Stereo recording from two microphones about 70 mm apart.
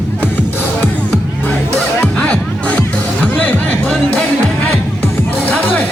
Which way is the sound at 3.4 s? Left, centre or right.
Centre.